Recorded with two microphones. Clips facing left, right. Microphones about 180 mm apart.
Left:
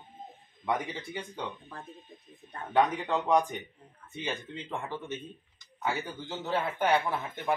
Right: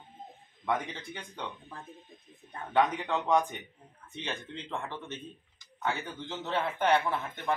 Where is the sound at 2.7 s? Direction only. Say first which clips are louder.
Left 1 dB; 5° left (ahead or behind).